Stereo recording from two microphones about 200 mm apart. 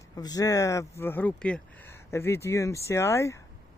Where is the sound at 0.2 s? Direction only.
20° left (ahead or behind).